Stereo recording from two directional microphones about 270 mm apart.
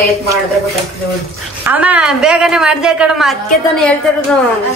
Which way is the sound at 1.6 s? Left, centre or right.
Centre.